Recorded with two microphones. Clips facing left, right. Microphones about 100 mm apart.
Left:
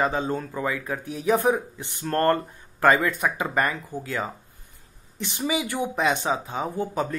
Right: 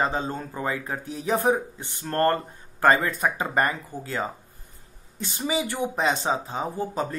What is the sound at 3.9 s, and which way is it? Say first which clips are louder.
Speech: left 3 dB; 15° left (ahead or behind).